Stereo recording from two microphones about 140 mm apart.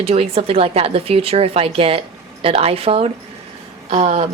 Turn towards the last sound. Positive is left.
turn(degrees=-50)  # may be behind; listen again after turning